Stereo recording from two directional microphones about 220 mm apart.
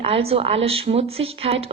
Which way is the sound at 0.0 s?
25° right (ahead or behind).